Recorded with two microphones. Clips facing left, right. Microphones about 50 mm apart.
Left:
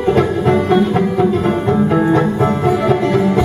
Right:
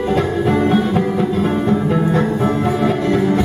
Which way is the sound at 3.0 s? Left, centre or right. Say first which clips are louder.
Left 2 dB; left.